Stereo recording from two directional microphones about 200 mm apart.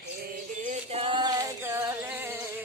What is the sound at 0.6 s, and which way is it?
Music, 35° right (ahead or behind).